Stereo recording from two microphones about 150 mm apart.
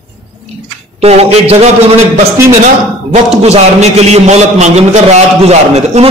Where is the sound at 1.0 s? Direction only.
45° right (ahead or behind).